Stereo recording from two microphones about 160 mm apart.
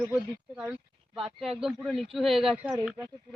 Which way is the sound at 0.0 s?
10° right (ahead or behind).